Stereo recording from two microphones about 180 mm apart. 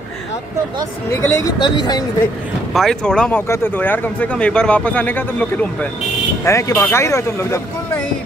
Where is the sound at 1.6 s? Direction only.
25° left (ahead or behind).